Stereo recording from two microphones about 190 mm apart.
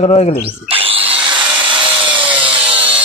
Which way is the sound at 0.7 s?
30° right (ahead or behind).